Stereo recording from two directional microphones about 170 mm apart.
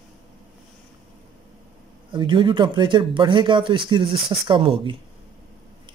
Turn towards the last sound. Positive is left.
turn(degrees=-30)  # may be behind; listen again after turning